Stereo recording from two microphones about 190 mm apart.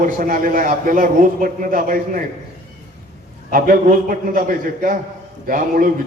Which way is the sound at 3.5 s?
45° right (ahead or behind).